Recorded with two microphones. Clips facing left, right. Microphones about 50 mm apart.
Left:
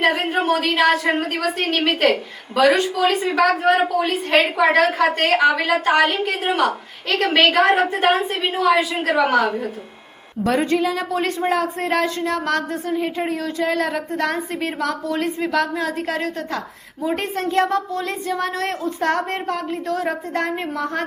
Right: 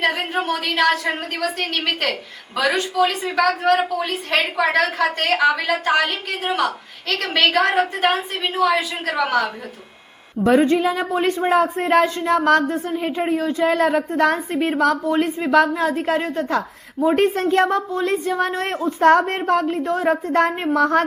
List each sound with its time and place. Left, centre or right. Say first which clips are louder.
0.0 s a woman's voice: left 2 dB; centre
10.8 s speech: right 1 dB; right
13.7 s a woman's voice: right 5 dB; right
14.8 s a woman's voice: right 8 dB; right
15.1 s a woman's voice: right 4 dB; right